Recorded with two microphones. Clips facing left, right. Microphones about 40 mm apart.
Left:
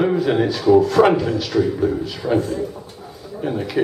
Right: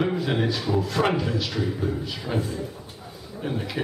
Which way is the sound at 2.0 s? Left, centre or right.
Centre.